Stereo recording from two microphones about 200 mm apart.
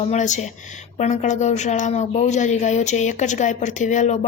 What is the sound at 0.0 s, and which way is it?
Speech, 35° left (ahead or behind).